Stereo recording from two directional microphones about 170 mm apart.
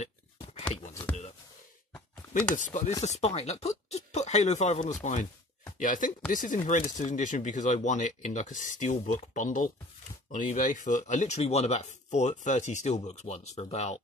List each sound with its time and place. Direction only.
2.5 s speech: 50° left (ahead or behind)
3.0 s speech: 40° left (ahead or behind)